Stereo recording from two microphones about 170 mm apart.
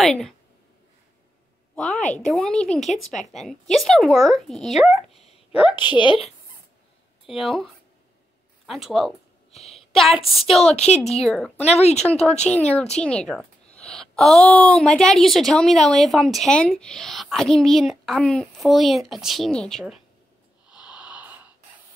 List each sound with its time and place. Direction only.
0.0 s a woman's voice: centre (ahead or behind)
2.0 s a woman's voice: 45° left (ahead or behind)
2.2 s a woman's voice: 5° left (ahead or behind)
5.2 s a sound: 35° left (ahead or behind)
5.8 s a woman's voice: 25° left (ahead or behind)
7.2 s a woman's voice: centre (ahead or behind)
11.6 s speech: 40° left (ahead or behind)
12.4 s a woman's voice: 10° left (ahead or behind)
20.6 s a sound: 5° right (ahead or behind)